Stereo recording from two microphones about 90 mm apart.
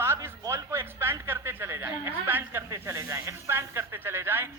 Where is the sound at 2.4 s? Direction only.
30° right (ahead or behind).